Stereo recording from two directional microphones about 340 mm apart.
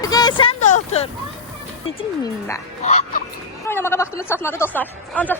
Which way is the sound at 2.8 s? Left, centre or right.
Left.